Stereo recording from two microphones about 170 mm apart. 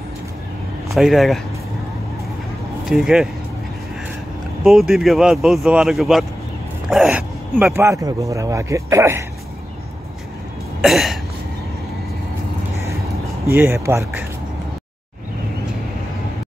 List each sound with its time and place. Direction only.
0.8 s speech: centre (ahead or behind)
2.8 s speech: centre (ahead or behind)
4.6 s speech: centre (ahead or behind); by 9.2 s 15° right (ahead or behind)
10.8 s cough: centre (ahead or behind)
13.5 s speech: 15° right (ahead or behind)